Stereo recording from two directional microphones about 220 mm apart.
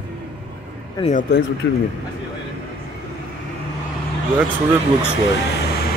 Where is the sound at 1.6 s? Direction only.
55° left (ahead or behind).